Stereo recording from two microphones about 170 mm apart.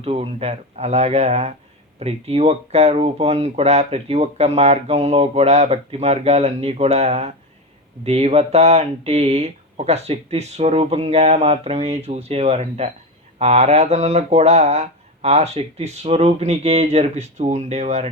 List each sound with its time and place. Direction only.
0.0 s speech: 35° right (ahead or behind)